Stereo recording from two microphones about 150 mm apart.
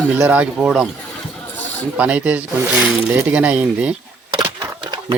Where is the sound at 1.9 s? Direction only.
10° right (ahead or behind).